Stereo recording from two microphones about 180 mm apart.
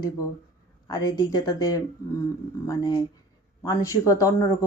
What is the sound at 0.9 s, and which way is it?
Speech, 20° left (ahead or behind).